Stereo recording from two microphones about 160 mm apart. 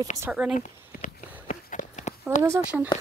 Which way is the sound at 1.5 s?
50° left (ahead or behind).